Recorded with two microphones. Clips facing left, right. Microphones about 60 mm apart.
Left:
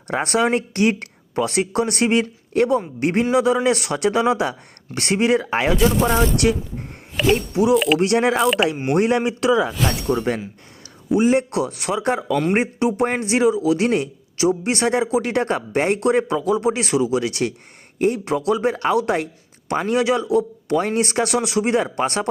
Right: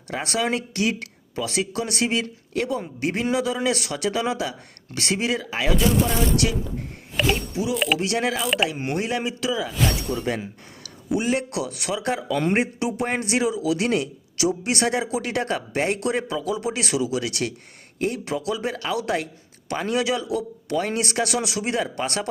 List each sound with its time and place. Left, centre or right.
0.1 s speech: left
5.7 s speech: centre
6.3 s speech: left
7.2 s speech: centre
7.9 s speech: left
8.7 s speech: centre
9.0 s speech: left